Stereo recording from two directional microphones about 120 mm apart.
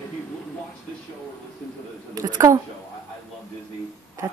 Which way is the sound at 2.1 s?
30° right (ahead or behind).